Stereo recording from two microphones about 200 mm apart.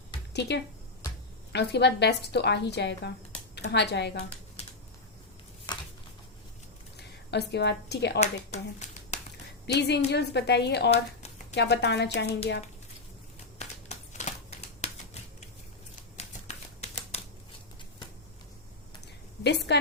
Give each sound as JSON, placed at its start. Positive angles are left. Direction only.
{"t": 0.3, "sound": "a woman's voice", "side_deg": 55}
{"t": 7.3, "sound": "a woman's voice", "side_deg": 55}
{"t": 8.2, "sound": "a woman's voice", "side_deg": 30}
{"t": 8.8, "sound": "a sound", "side_deg": 35}
{"t": 9.6, "sound": "a woman's voice", "side_deg": 55}
{"t": 13.6, "sound": "a sound", "side_deg": 35}
{"t": 14.8, "sound": "typewriter", "side_deg": 35}
{"t": 19.4, "sound": "a woman's voice", "side_deg": 60}